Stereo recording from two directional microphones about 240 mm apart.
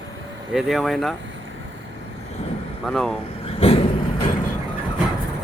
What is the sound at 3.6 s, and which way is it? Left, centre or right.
Vehicle, left.